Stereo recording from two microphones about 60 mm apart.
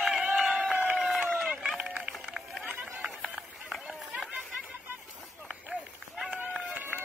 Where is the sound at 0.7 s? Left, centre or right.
Right.